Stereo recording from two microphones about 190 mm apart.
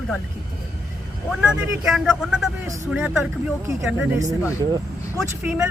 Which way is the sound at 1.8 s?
5° right (ahead or behind).